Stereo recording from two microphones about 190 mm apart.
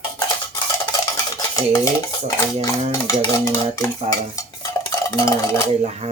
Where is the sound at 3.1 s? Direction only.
15° left (ahead or behind).